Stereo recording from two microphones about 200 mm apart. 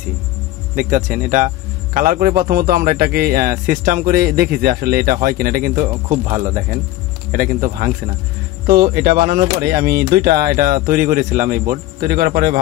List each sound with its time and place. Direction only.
0.7 s speech: 40° right (ahead or behind)